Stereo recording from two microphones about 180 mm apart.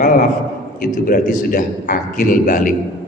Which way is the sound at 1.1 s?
50° left (ahead or behind).